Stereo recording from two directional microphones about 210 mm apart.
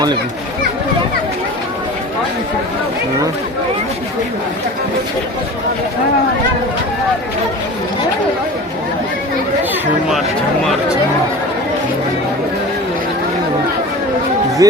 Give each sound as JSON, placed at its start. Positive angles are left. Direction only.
{"t": 14.6, "sound": "speech", "side_deg": -15}